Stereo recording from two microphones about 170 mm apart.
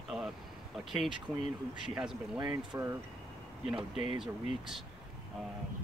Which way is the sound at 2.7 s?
15° right (ahead or behind).